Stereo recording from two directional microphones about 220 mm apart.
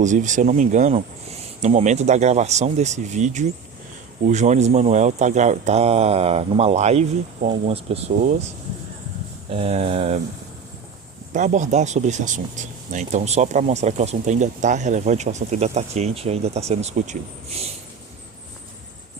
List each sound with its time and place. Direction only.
0.0 s speech: 35° right (ahead or behind)
9.5 s a sound: 25° right (ahead or behind)
11.3 s speech: 35° right (ahead or behind)